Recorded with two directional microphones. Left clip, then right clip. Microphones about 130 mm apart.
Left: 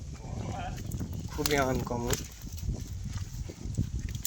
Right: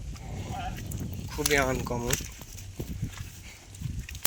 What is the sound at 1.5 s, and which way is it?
Speech, 5° left (ahead or behind).